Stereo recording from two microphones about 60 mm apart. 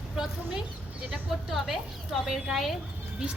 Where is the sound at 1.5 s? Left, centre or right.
Centre.